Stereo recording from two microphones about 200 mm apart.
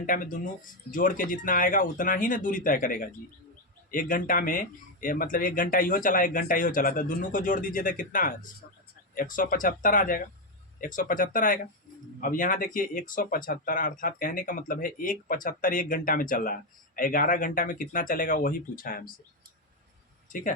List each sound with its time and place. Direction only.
0.0 s speech: 45° left (ahead or behind)